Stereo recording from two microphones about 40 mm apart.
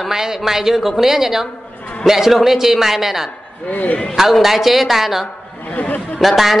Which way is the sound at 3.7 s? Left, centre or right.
Left.